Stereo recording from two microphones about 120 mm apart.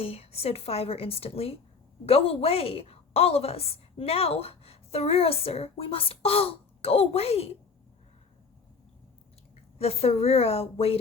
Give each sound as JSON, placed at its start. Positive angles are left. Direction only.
{"t": 0.0, "sound": "a woman's voice", "side_deg": 55}
{"t": 9.7, "sound": "a woman's voice", "side_deg": 55}